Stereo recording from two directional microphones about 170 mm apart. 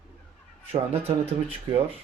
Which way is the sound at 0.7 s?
35° right (ahead or behind).